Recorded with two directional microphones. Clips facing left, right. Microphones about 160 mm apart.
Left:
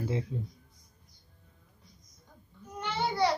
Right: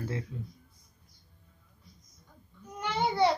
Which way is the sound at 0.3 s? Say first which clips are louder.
Left 4 dB; 30° left (ahead or behind).